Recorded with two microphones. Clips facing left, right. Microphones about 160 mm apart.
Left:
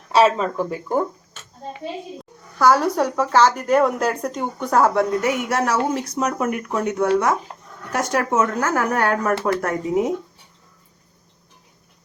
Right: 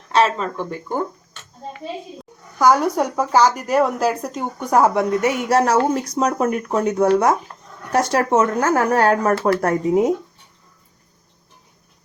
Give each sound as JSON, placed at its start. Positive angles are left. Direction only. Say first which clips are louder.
{"t": 0.1, "sound": "speech", "louder": "left 2 dB", "side_deg": 5}
{"t": 2.6, "sound": "speech", "louder": "right 1 dB", "side_deg": -15}
{"t": 4.6, "sound": "speech", "louder": "right 1 dB", "side_deg": -15}
{"t": 5.5, "sound": "speech", "louder": "right 4 dB", "side_deg": -40}